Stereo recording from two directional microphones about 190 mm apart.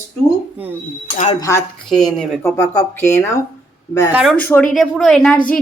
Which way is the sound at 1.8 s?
Centre (ahead or behind).